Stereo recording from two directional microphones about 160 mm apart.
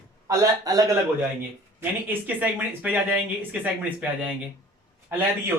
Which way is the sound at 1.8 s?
10° right (ahead or behind).